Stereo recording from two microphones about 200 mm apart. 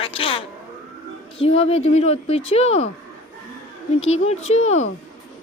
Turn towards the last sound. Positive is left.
turn(degrees=30)  # may be behind; listen again after turning